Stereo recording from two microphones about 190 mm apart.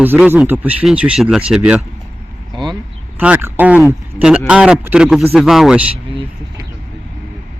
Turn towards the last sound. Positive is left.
turn(degrees=-25)  # may be behind; listen again after turning